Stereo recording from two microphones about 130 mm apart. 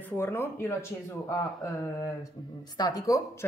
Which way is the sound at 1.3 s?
20° left (ahead or behind).